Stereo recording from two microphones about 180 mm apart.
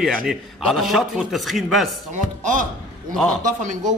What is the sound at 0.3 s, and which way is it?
A man's voice, centre (ahead or behind).